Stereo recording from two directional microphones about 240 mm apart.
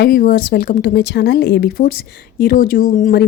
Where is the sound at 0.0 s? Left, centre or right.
Left.